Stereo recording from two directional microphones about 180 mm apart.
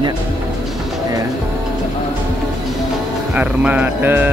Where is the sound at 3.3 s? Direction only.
10° right (ahead or behind).